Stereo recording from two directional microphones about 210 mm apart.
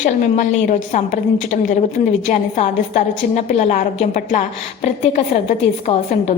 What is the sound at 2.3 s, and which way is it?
A woman's voice, 35° left (ahead or behind).